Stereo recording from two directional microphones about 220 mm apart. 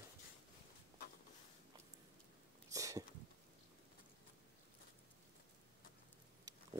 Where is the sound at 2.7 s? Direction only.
15° right (ahead or behind).